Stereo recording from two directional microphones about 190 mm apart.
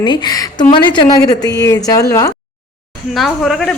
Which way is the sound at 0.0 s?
20° left (ahead or behind).